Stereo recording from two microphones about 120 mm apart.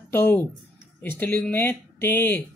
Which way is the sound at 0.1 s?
15° left (ahead or behind).